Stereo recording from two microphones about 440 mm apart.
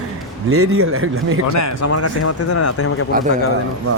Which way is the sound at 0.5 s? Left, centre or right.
Right.